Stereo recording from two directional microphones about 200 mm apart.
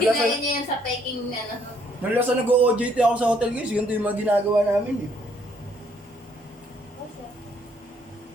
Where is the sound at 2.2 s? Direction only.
10° right (ahead or behind).